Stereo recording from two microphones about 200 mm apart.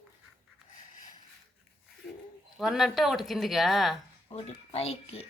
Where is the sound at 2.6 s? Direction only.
Centre (ahead or behind).